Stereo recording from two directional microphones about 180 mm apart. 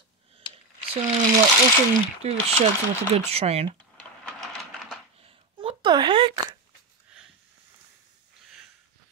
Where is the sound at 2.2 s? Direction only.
35° right (ahead or behind).